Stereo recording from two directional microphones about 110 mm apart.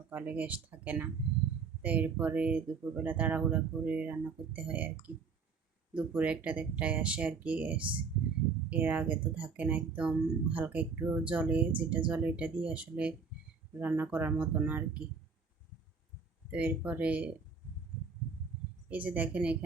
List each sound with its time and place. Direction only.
0.1 s speech: 15° right (ahead or behind)
16.5 s speech: 10° right (ahead or behind)
18.9 s speech: 15° right (ahead or behind)